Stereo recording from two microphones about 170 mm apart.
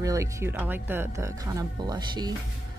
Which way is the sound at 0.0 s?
20° right (ahead or behind).